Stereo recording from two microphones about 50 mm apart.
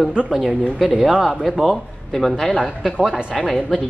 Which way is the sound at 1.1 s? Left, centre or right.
Centre.